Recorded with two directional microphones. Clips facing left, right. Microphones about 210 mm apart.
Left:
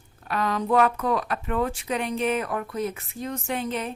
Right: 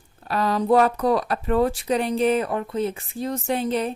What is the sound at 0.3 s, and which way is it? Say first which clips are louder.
A woman's voice: right 5 dB; 35° right (ahead or behind).